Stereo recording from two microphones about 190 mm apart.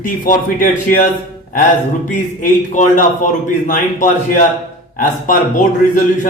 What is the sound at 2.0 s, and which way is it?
Speech, 40° left (ahead or behind).